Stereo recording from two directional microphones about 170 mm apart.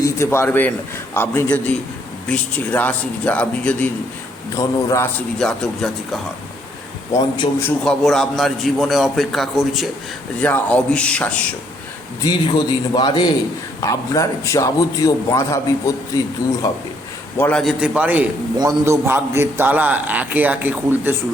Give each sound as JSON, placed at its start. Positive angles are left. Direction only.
{"t": 0.0, "sound": "a man's voice", "side_deg": 15}
{"t": 4.5, "sound": "a man's voice", "side_deg": 20}
{"t": 5.4, "sound": "a man's voice", "side_deg": 5}
{"t": 7.1, "sound": "a man's voice", "side_deg": 25}
{"t": 7.9, "sound": "a man's voice", "side_deg": 0}
{"t": 12.2, "sound": "a man's voice", "side_deg": 25}
{"t": 17.3, "sound": "a man's voice", "side_deg": 10}
{"t": 17.6, "sound": "a man's voice", "side_deg": -5}